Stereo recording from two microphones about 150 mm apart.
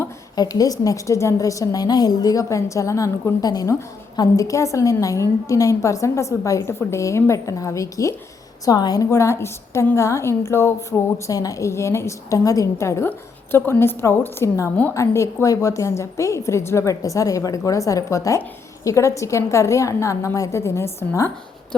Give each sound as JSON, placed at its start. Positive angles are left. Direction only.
{"t": 0.3, "sound": "a woman's voice", "side_deg": 25}